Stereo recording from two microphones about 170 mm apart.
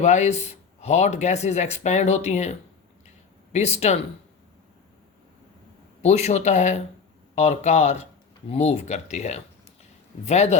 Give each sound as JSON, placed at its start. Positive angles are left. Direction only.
{"t": 0.0, "sound": "speech", "side_deg": 45}
{"t": 6.0, "sound": "speech", "side_deg": 40}